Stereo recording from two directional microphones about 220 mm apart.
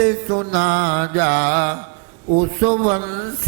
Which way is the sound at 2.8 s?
25° right (ahead or behind).